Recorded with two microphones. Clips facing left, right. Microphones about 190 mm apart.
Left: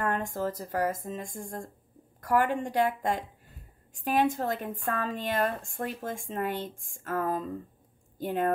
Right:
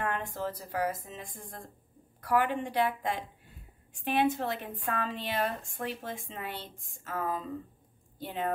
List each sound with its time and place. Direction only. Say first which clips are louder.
0.0 s a woman's voice: left 4 dB; 45° left (ahead or behind)